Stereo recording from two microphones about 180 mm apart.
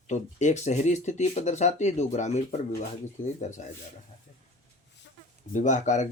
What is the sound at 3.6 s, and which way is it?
Speech, 40° left (ahead or behind).